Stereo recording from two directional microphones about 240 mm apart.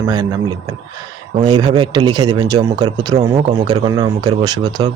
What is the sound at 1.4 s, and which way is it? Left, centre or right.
Speech, centre.